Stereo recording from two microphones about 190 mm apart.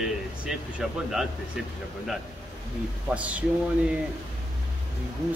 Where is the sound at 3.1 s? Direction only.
5° right (ahead or behind).